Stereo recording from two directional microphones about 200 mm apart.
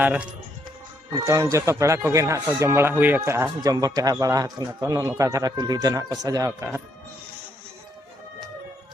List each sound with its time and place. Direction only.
0.0 s speech: 10° right (ahead or behind)